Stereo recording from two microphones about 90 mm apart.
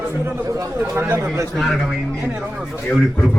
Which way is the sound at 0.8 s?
20° right (ahead or behind).